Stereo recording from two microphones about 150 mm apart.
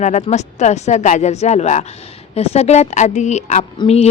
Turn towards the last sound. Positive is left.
turn(degrees=45)  # may be behind; listen again after turning